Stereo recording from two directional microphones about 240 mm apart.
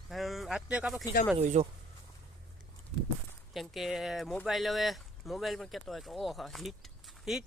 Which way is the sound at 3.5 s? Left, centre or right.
Centre.